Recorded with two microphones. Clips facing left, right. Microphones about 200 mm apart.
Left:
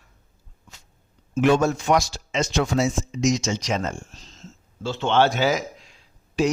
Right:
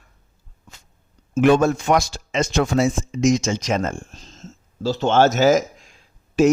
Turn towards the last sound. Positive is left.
turn(degrees=-50)  # may be behind; listen again after turning